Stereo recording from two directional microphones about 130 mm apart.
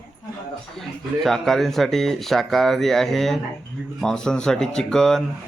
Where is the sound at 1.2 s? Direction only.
Centre (ahead or behind).